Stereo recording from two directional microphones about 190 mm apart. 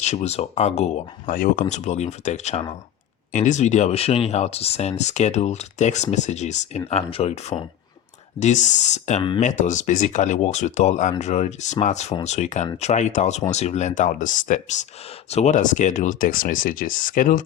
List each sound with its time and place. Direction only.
0.0 s speech: 35° left (ahead or behind)